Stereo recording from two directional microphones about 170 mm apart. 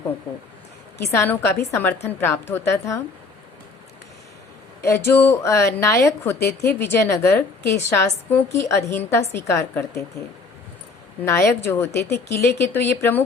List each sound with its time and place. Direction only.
1.1 s a woman's voice: 15° left (ahead or behind)
4.8 s a woman's voice: 15° left (ahead or behind)
11.3 s a woman's voice: 15° left (ahead or behind)